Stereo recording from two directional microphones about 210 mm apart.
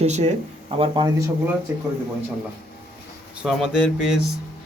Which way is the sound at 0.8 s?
20° right (ahead or behind).